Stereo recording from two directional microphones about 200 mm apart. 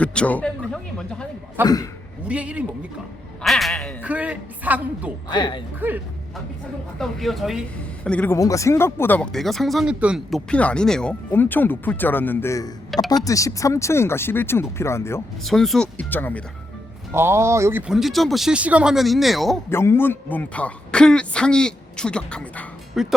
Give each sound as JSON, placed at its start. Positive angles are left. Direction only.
{"t": 0.0, "sound": "a sound", "side_deg": 5}
{"t": 1.6, "sound": "speech", "side_deg": 20}
{"t": 2.2, "sound": "a man's voice", "side_deg": -5}
{"t": 5.3, "sound": "speech", "side_deg": 25}
{"t": 7.0, "sound": "speech", "side_deg": 0}
{"t": 15.4, "sound": "speech", "side_deg": 0}
{"t": 17.1, "sound": "speech", "side_deg": -10}
{"t": 19.7, "sound": "speech", "side_deg": 10}